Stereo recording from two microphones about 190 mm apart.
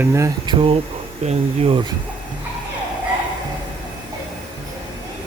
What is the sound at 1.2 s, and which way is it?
Speech, 30° right (ahead or behind).